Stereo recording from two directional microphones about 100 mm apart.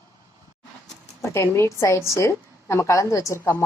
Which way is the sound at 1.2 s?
30° left (ahead or behind).